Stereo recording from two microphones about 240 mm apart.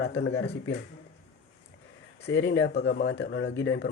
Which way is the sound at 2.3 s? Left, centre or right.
Left.